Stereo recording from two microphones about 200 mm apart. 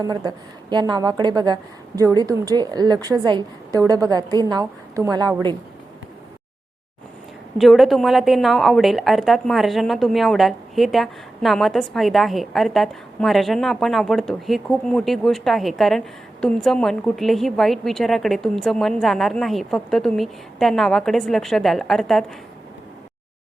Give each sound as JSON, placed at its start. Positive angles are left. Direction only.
{"t": 0.0, "sound": "a woman's voice", "side_deg": -20}
{"t": 7.6, "sound": "a woman's voice", "side_deg": 0}